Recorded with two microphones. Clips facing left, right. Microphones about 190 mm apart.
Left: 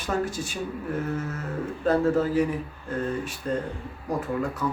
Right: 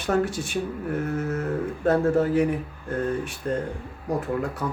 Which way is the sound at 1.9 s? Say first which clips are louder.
Right 1 dB; 60° right (ahead or behind).